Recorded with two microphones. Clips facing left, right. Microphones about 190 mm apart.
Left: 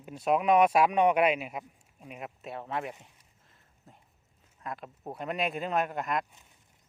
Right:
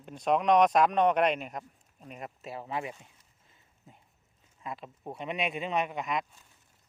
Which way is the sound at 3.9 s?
Centre (ahead or behind).